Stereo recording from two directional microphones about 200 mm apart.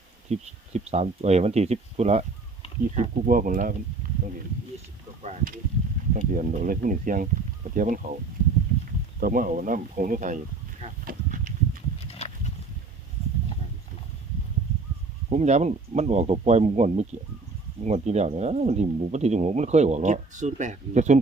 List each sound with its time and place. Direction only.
0.3 s speech: 35° right (ahead or behind)
4.0 s a sound: 45° right (ahead or behind)
5.2 s speech: 35° right (ahead or behind)
9.2 s speech: 45° right (ahead or behind)
11.9 s a sound: 30° left (ahead or behind)
15.3 s speech: 35° right (ahead or behind)